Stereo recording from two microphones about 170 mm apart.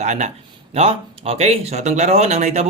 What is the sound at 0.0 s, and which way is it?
Speech, 45° right (ahead or behind).